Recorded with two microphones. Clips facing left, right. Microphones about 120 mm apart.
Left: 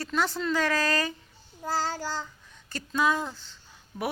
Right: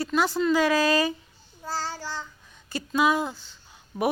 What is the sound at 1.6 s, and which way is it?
Child singing, 45° left (ahead or behind).